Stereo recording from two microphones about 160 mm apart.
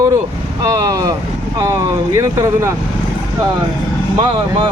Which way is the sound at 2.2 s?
20° right (ahead or behind).